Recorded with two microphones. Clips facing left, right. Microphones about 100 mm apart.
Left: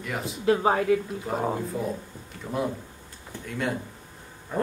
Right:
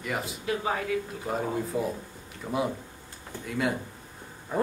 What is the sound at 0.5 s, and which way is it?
Speech, 40° left (ahead or behind).